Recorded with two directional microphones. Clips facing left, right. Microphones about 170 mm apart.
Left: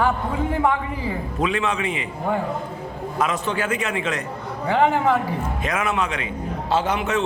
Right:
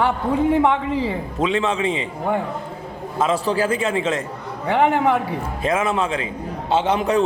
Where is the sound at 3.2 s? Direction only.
30° right (ahead or behind).